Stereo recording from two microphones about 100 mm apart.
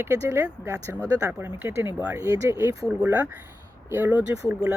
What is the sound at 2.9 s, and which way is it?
Speech, 15° right (ahead or behind).